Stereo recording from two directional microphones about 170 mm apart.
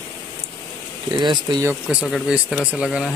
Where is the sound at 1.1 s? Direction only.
25° right (ahead or behind).